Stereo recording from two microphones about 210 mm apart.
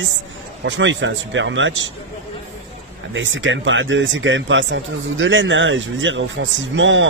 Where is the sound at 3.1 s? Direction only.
65° right (ahead or behind).